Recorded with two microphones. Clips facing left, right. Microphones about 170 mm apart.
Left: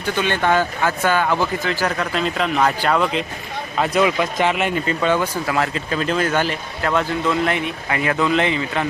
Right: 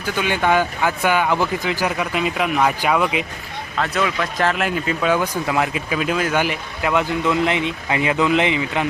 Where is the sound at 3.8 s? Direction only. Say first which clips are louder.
Left 4 dB; 20° left (ahead or behind).